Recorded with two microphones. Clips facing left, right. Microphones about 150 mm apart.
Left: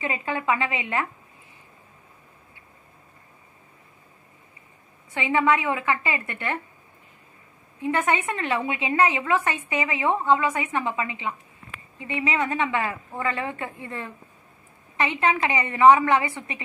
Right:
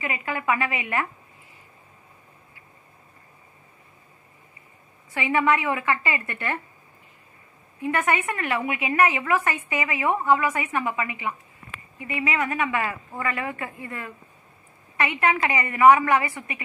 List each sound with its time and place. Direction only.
0.0 s a woman's voice: 25° left (ahead or behind)
5.1 s a woman's voice: 20° left (ahead or behind)
7.8 s a woman's voice: 20° left (ahead or behind)